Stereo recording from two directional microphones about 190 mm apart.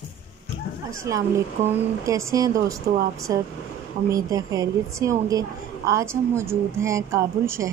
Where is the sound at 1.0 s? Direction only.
15° right (ahead or behind).